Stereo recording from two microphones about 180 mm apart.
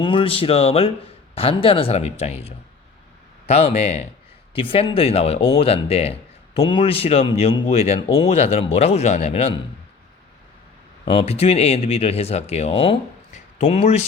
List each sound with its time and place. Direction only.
0.0 s speech: 30° left (ahead or behind)
11.0 s speech: 30° left (ahead or behind)